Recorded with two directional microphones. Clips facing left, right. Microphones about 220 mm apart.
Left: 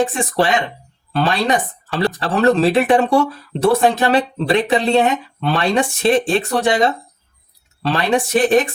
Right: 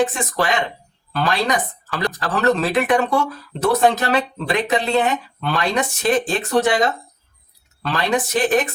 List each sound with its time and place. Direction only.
0.0 s speech: 30° left (ahead or behind)